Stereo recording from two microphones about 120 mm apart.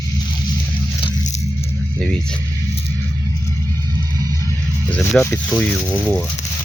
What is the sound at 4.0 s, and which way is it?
Music, 30° right (ahead or behind).